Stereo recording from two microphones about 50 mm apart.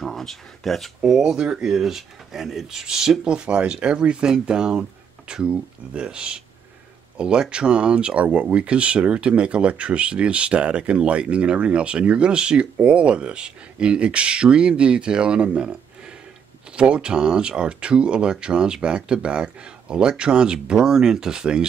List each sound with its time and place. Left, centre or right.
0.0 s speech: centre
1.3 s speech: centre
3.3 s speech: right
16.7 s speech: right